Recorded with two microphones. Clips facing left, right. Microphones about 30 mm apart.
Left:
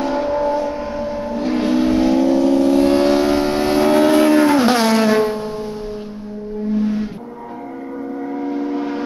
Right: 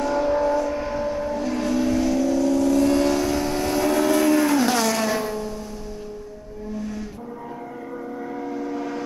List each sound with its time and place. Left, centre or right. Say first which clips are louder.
0.0 s vehicle: left 2 dB; left
6.7 s vehicle: left 11 dB; left
8.5 s a sound: left 7 dB; left